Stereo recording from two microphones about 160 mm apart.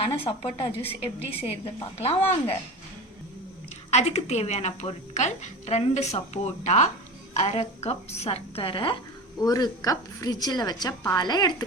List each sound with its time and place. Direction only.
0.0 s a woman's voice: 35° left (ahead or behind)
2.0 s a woman's voice: 40° left (ahead or behind)
3.9 s a woman's voice: 45° left (ahead or behind); by 11.5 s 25° left (ahead or behind)